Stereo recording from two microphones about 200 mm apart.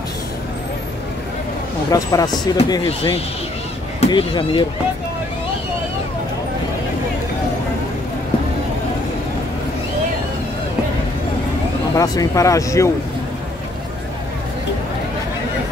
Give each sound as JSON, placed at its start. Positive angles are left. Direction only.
{"t": 1.9, "sound": "speech", "side_deg": 20}
{"t": 11.9, "sound": "speech", "side_deg": 15}